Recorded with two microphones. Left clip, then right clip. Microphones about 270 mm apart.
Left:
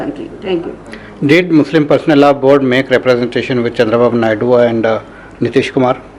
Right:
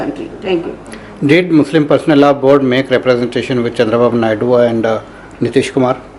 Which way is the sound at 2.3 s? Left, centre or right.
Left.